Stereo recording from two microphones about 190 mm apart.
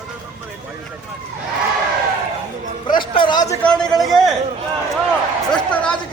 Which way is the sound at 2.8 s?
25° left (ahead or behind).